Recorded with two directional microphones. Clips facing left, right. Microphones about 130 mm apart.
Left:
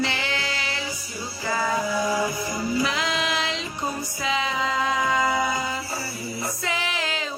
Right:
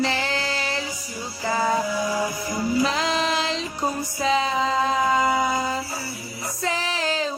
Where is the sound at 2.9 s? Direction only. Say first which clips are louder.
Right 3 dB; 35° right (ahead or behind).